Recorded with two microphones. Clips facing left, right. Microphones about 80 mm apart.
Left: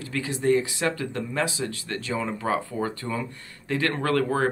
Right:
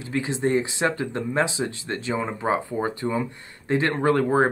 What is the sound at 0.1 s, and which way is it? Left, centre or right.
Speech, right.